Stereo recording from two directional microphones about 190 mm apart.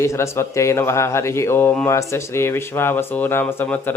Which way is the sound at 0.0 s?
15° left (ahead or behind).